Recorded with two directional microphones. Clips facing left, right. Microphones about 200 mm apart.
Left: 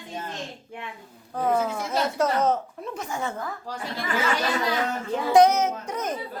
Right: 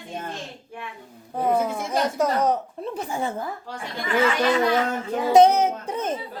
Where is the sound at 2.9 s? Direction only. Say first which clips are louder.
Right 3 dB; 30° right (ahead or behind).